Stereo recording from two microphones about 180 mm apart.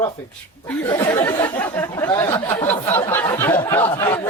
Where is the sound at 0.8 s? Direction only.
15° left (ahead or behind).